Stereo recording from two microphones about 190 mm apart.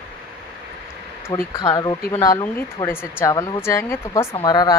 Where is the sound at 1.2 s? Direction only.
20° left (ahead or behind).